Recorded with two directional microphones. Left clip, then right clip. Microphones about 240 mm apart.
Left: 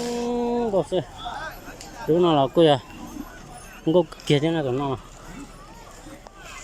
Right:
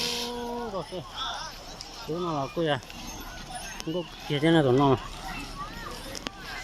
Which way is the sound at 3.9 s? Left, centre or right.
Left.